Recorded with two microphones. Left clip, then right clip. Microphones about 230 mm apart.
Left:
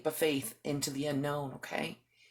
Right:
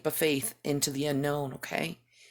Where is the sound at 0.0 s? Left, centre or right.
Right.